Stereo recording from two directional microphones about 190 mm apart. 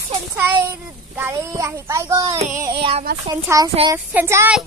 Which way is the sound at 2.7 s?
30° right (ahead or behind).